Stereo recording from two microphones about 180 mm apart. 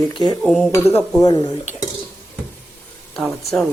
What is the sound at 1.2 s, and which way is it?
Speech, 20° left (ahead or behind).